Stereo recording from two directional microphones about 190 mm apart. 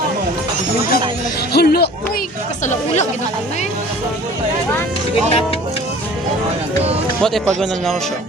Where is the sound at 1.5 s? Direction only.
55° left (ahead or behind).